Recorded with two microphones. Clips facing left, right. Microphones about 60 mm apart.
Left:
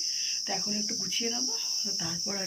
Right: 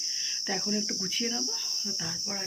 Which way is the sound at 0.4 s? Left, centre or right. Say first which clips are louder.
Right 4 dB; right.